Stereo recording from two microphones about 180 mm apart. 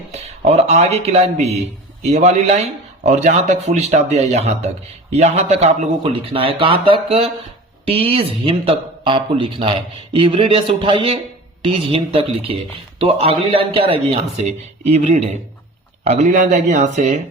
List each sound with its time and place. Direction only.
0.1 s speech: 35° right (ahead or behind)